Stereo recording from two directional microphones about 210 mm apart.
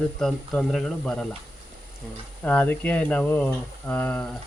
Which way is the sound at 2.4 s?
5° left (ahead or behind).